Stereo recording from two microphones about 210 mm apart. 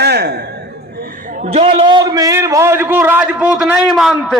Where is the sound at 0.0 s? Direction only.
50° right (ahead or behind).